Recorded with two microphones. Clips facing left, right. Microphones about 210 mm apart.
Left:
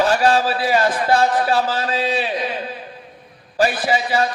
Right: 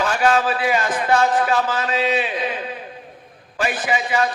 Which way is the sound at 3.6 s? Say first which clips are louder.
Left 4 dB; 35° left (ahead or behind).